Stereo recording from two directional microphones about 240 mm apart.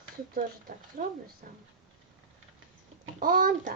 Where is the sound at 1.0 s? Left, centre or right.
Right.